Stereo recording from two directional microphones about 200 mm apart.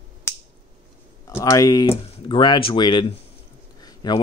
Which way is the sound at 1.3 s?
15° left (ahead or behind).